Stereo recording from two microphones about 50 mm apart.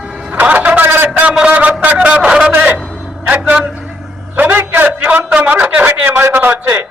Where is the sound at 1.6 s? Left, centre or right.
Right.